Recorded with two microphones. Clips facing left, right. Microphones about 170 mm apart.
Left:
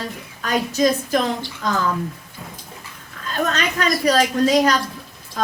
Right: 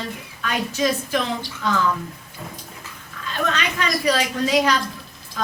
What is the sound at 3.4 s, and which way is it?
A woman's voice, 40° left (ahead or behind).